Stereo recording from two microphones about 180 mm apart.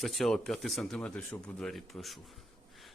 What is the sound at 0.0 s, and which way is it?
Speech, centre (ahead or behind).